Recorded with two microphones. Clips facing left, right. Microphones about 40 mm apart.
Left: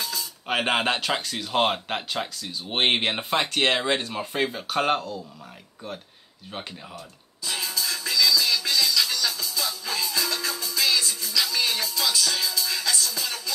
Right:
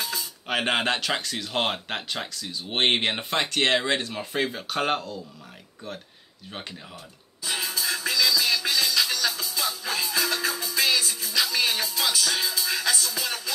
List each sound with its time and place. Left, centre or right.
0.0 s a sound: centre
0.5 s speech: centre
7.4 s music: centre